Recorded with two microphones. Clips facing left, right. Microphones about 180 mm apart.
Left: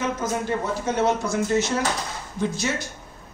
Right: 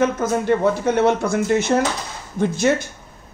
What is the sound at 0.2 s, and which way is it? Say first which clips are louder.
A man's voice: right 8 dB; 60° right (ahead or behind).